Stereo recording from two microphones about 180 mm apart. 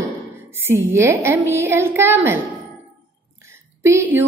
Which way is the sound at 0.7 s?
15° right (ahead or behind).